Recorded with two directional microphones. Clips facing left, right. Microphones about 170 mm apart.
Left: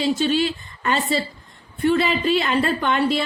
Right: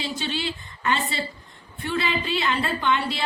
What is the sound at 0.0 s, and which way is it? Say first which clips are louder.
Speech: left 10 dB; 45° left (ahead or behind).